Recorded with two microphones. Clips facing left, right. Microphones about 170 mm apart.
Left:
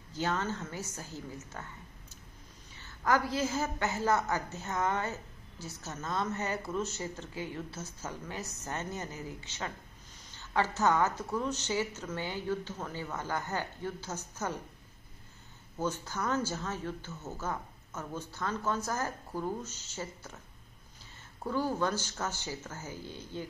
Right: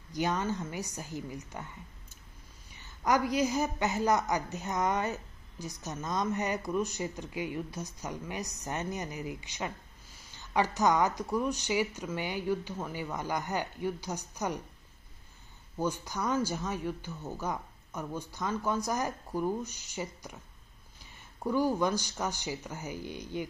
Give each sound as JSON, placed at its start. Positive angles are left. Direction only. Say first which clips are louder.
{"t": 0.1, "sound": "a woman's voice", "louder": "right 2 dB", "side_deg": -15}
{"t": 2.7, "sound": "a woman's voice", "louder": "right 1 dB", "side_deg": -15}
{"t": 15.8, "sound": "a woman's voice", "louder": "right 2 dB", "side_deg": -15}
{"t": 21.4, "sound": "a woman's voice", "louder": "right 3 dB", "side_deg": -15}